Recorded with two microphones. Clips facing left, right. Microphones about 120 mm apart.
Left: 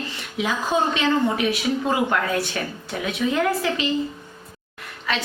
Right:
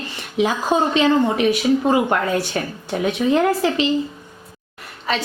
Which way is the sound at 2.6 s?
30° right (ahead or behind).